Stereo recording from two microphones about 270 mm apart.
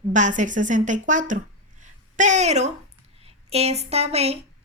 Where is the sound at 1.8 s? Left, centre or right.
Right.